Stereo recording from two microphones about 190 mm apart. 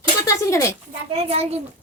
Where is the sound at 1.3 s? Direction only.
35° right (ahead or behind).